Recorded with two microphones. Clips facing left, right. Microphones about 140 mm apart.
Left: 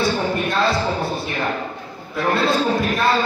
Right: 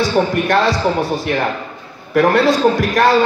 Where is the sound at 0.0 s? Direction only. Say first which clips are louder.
Right 5 dB; 90° right.